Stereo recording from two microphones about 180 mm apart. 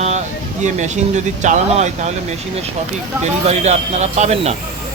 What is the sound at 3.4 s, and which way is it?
Speech, 40° right (ahead or behind).